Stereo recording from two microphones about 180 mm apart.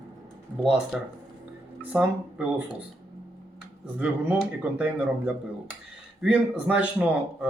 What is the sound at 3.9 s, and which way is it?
Speech, 10° right (ahead or behind).